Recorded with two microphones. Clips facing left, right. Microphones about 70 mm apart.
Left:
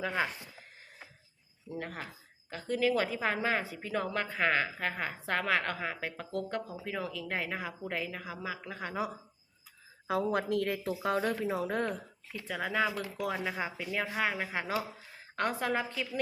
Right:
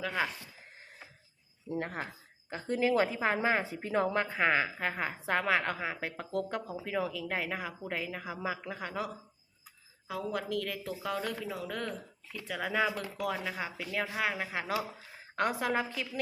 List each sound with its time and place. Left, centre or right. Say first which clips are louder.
0.0 s speech: left 1 dB; centre
1.7 s a woman's voice: right 4 dB; right; by 8.2 s centre
8.2 s a woman's voice: right 3 dB; centre
8.7 s speech: even; centre
10.1 s a woman's voice: left 5 dB; left
12.5 s speech: even; centre